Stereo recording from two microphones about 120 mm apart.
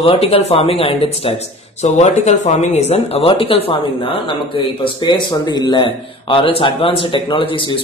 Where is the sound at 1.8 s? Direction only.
70° left (ahead or behind).